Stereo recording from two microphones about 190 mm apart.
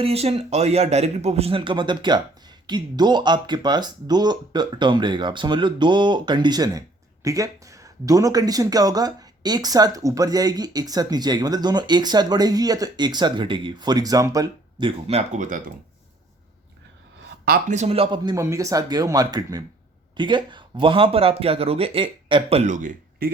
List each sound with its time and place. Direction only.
0.0 s a man's voice: 30° right (ahead or behind)
17.4 s speech: 55° right (ahead or behind)
17.7 s speech: 30° right (ahead or behind)